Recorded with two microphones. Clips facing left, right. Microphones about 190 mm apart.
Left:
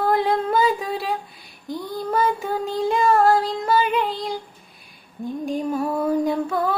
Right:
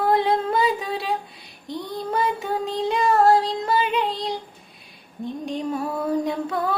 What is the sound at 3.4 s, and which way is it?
Music, centre (ahead or behind).